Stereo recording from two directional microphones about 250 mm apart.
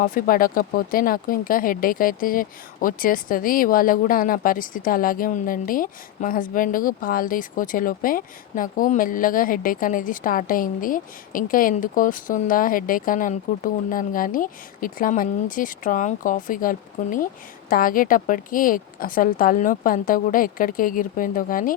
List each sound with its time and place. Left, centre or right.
0.0 s speech: left